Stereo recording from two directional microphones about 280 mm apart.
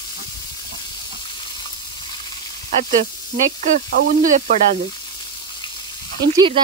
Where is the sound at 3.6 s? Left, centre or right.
Right.